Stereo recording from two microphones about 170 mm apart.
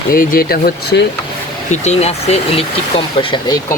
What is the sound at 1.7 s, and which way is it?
Speech, 40° left (ahead or behind).